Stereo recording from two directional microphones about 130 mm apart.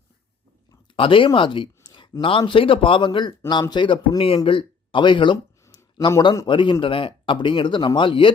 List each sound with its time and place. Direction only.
0.9 s speech: 40° left (ahead or behind)
5.6 s a sound: 30° left (ahead or behind)
6.5 s speech: 40° left (ahead or behind)